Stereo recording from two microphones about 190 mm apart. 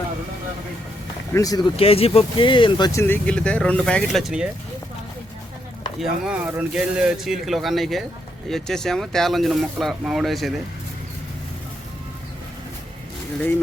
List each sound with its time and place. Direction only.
1.3 s speech: 20° left (ahead or behind)
1.7 s speech: 30° left (ahead or behind); by 4.4 s centre (ahead or behind)
6.0 s speech: 5° right (ahead or behind)